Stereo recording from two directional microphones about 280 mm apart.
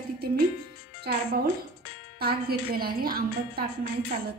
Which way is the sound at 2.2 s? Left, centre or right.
Right.